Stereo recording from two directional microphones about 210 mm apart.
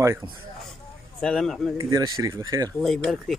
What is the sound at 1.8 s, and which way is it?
Speech, 15° right (ahead or behind).